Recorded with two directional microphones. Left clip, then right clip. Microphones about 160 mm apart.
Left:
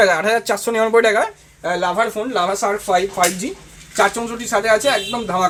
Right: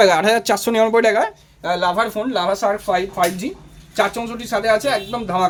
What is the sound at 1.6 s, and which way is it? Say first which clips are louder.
Speech: even; 20° right (ahead or behind).